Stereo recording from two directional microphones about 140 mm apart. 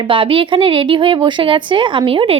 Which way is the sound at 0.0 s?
35° right (ahead or behind).